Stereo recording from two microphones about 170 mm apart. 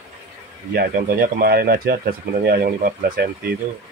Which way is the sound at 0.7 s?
60° right (ahead or behind).